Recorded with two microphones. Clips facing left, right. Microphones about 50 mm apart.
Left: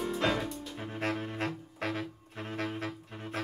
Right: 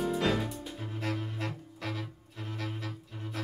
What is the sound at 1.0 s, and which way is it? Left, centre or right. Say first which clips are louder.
Music: left 3 dB; left.